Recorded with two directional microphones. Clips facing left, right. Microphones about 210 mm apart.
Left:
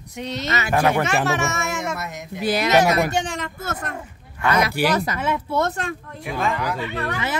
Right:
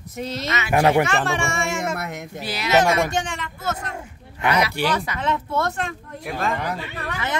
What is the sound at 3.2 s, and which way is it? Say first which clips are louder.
Speech: even; 40° left (ahead or behind).